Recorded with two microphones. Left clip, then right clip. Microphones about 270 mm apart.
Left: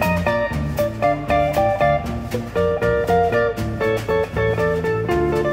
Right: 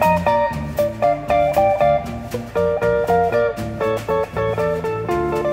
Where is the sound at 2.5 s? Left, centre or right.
Right.